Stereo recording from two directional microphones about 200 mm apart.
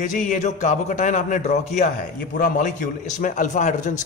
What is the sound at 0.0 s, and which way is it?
A man's voice, 40° left (ahead or behind).